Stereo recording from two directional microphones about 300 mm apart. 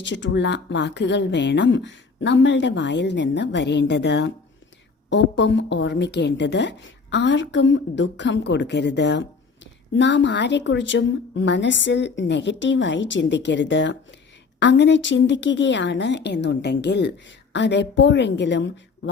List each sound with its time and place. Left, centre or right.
0.0 s speech: left